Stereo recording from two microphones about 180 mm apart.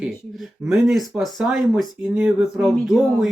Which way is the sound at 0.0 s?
5° right (ahead or behind).